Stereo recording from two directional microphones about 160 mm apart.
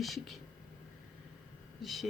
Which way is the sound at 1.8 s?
Centre (ahead or behind).